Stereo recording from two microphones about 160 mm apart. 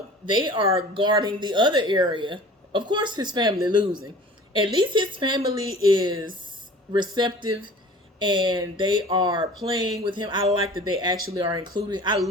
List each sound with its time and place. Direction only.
0.3 s speech: 30° right (ahead or behind)